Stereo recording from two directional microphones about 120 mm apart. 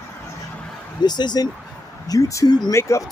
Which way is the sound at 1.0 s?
35° left (ahead or behind).